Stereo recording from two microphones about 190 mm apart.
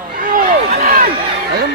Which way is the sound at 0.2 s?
45° right (ahead or behind).